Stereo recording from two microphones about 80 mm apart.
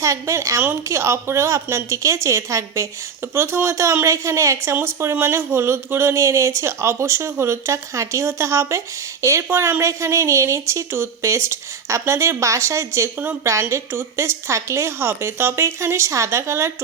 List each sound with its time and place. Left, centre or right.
0.0 s a woman's voice: right